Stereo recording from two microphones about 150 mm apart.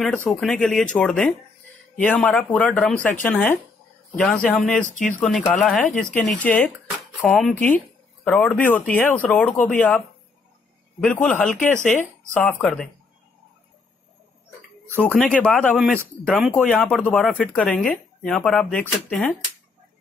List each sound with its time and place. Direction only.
0.0 s speech: 5° left (ahead or behind)
4.8 s speech: 60° left (ahead or behind)
5.5 s speech: 5° left (ahead or behind)
11.2 s speech: 10° left (ahead or behind)
11.5 s speech: 55° left (ahead or behind)
12.4 s speech: 10° left (ahead or behind)
14.9 s speech: 10° left (ahead or behind)